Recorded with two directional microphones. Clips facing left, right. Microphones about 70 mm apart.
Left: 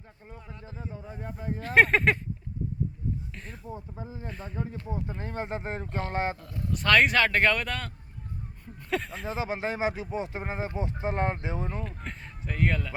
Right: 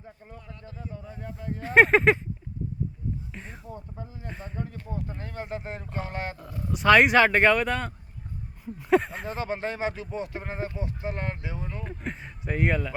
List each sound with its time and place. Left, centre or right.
0.3 s a man's voice: left
1.6 s speech: centre
3.3 s speech: centre
3.7 s a man's voice: centre
4.3 s speech: centre
4.5 s speech: centre
5.2 s a man's voice: left
6.6 s speech: centre
8.9 s speech: right
9.2 s a man's voice: centre; by 11.8 s left
11.8 s speech: centre